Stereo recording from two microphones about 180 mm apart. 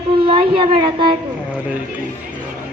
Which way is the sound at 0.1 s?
30° right (ahead or behind).